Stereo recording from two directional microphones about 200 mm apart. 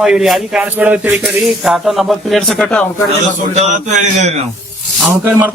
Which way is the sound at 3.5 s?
35° right (ahead or behind).